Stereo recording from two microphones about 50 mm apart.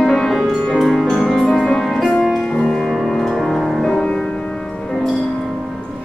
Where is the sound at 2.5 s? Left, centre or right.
Centre.